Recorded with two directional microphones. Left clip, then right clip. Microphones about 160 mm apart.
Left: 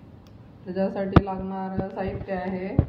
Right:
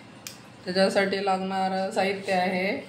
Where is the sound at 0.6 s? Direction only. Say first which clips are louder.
Right 5 dB; 35° right (ahead or behind).